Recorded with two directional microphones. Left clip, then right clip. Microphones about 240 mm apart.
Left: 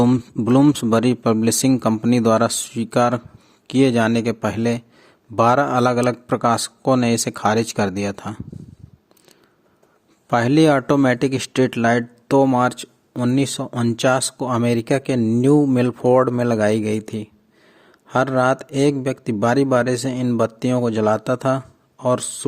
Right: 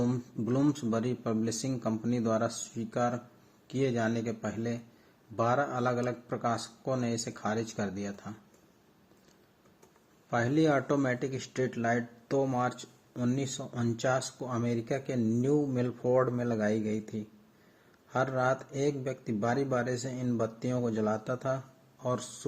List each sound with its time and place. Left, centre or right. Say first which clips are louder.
0.0 s speech: left 15 dB; left
10.2 s speech: left 13 dB; left